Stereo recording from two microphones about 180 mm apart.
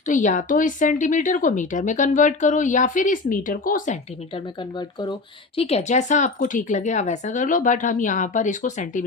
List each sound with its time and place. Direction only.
0.1 s speech: 45° left (ahead or behind)
5.5 s speech: 35° left (ahead or behind)